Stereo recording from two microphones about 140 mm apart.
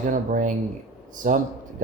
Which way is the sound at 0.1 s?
70° right (ahead or behind).